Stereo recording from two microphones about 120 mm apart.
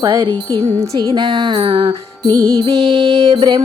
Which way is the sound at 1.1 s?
40° right (ahead or behind).